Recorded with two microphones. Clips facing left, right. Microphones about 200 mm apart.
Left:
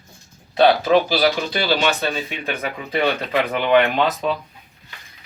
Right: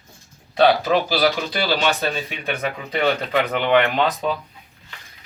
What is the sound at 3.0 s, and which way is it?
Speech, centre (ahead or behind).